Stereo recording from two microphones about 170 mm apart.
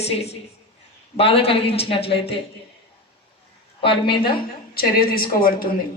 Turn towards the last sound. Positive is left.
turn(degrees=60)  # may be behind; listen again after turning